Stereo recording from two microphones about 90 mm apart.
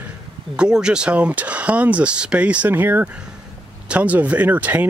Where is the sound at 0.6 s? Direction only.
10° right (ahead or behind).